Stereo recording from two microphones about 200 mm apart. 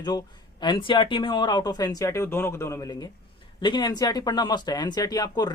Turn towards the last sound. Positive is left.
turn(degrees=20)  # may be behind; listen again after turning